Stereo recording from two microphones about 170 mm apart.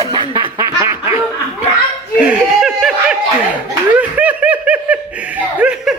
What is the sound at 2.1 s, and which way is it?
Speech, 5° right (ahead or behind).